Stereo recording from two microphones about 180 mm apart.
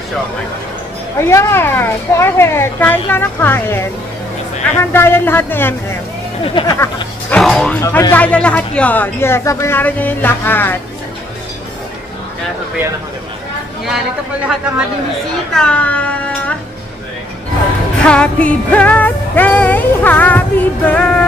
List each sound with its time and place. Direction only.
1.2 s music: 15° left (ahead or behind)
6.4 s speech: 30° left (ahead or behind)
7.2 s speech: 5° left (ahead or behind)
7.8 s music: 15° left (ahead or behind)
15.5 s speech: 5° left (ahead or behind)
18.0 s music: 5° left (ahead or behind)